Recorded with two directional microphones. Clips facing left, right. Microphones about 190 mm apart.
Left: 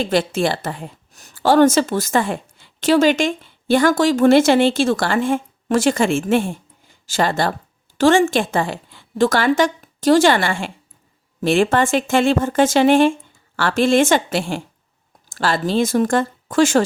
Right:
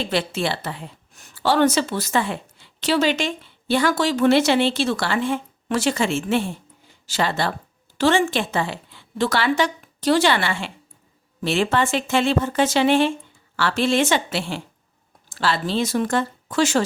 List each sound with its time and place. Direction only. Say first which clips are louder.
0.0 s a woman's voice: left 5 dB; 45° left (ahead or behind)